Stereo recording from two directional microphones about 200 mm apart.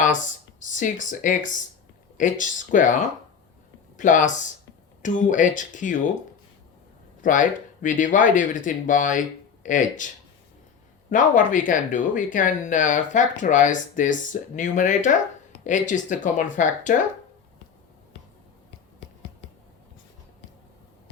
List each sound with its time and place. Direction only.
0.6 s speech: 40° left (ahead or behind)
7.2 s speech: 40° left (ahead or behind)
11.1 s speech: 40° left (ahead or behind)